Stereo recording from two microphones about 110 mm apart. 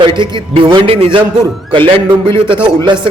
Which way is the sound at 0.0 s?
50° right (ahead or behind).